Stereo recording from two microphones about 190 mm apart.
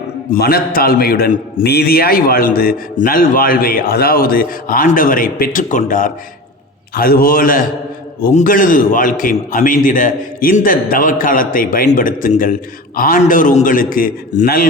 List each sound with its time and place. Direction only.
0.3 s a man's voice: 50° left (ahead or behind)